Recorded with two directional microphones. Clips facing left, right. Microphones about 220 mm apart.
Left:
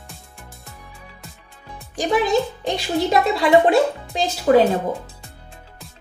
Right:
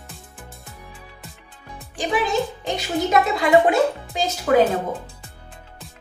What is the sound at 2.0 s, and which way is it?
Speech, 40° left (ahead or behind).